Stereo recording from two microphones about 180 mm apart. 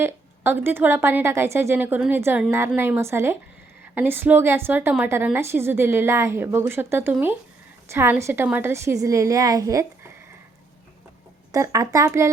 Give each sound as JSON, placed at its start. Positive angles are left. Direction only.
{"t": 0.0, "sound": "a woman's voice", "side_deg": -10}
{"t": 11.5, "sound": "a woman's voice", "side_deg": -15}